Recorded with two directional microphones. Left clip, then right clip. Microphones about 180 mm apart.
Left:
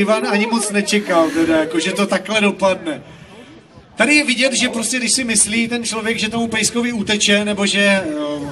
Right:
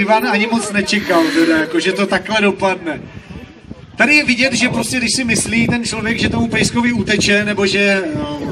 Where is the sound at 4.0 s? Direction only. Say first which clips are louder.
Right 2 dB; 55° left (ahead or behind).